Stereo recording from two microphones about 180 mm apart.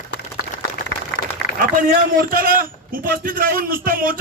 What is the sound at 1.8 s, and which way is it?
A man's voice, 50° right (ahead or behind).